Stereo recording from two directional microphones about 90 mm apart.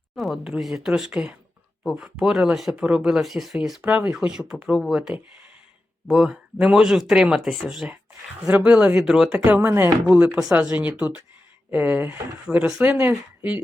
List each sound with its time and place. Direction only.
0.2 s speech: 5° right (ahead or behind)
3.8 s speech: 15° right (ahead or behind); by 7.9 s centre (ahead or behind)
8.4 s speech: 15° right (ahead or behind)
9.6 s speech: 25° right (ahead or behind)
10.2 s speech: 15° right (ahead or behind)